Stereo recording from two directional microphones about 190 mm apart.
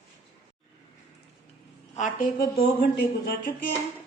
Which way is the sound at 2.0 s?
40° left (ahead or behind).